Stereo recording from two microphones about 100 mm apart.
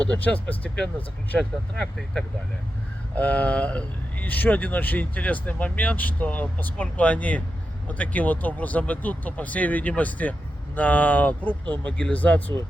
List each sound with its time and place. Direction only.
0.0 s speech: 10° left (ahead or behind)
11.6 s speech: 50° right (ahead or behind)
11.9 s speech: 15° left (ahead or behind)